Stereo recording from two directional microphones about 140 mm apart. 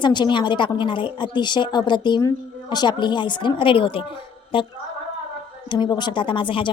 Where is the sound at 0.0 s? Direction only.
35° left (ahead or behind).